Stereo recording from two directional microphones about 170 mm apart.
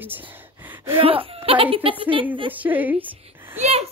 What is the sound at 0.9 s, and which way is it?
A woman's voice, 30° right (ahead or behind).